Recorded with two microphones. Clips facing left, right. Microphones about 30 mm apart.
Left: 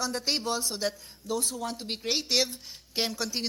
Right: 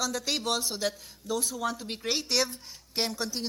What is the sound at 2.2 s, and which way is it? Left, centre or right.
A woman's voice, left.